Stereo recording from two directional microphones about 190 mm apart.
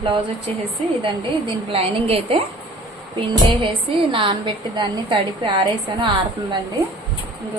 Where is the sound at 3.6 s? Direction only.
25° right (ahead or behind).